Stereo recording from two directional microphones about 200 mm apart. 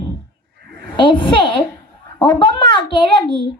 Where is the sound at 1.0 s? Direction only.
25° left (ahead or behind).